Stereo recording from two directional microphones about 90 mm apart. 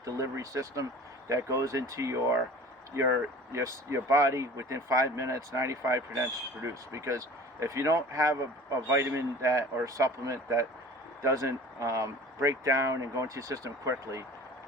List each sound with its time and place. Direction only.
0.0 s speech: 35° right (ahead or behind)